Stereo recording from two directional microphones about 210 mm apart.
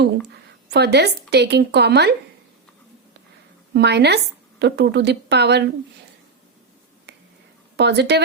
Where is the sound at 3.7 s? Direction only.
55° right (ahead or behind).